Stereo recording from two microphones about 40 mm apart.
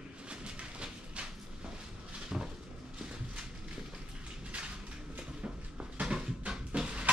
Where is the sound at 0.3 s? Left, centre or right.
Right.